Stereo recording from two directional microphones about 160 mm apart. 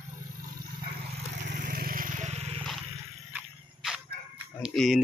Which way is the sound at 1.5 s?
60° right (ahead or behind).